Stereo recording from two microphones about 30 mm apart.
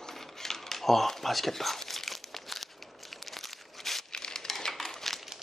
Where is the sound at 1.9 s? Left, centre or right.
Centre.